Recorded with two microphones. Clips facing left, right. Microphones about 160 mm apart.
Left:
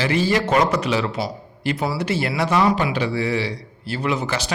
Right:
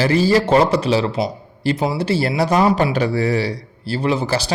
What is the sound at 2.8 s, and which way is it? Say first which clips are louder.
Speech: right 4 dB; 45° right (ahead or behind).